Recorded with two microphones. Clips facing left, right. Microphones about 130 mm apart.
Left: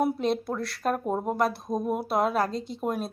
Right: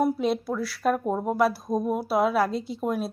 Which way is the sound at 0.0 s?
5° right (ahead or behind).